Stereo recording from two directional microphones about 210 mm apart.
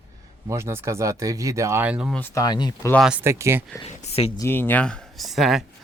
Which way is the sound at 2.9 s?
Centre (ahead or behind).